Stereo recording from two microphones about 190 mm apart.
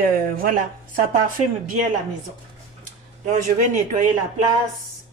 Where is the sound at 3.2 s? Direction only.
40° right (ahead or behind).